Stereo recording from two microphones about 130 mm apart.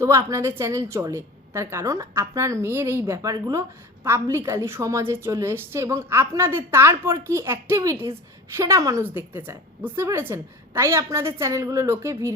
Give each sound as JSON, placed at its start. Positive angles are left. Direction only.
{"t": 0.0, "sound": "a woman's voice", "side_deg": -25}